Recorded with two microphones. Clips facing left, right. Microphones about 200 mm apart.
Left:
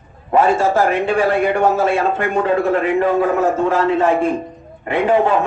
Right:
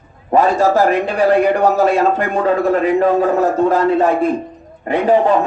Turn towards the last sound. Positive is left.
turn(degrees=-40)  # may be behind; listen again after turning